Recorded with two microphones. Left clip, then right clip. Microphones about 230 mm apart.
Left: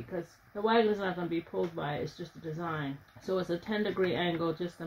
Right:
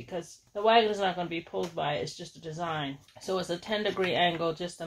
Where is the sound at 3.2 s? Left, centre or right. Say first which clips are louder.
Right 1 dB; centre.